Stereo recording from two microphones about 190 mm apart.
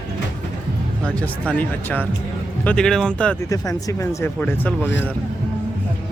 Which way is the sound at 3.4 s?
15° left (ahead or behind).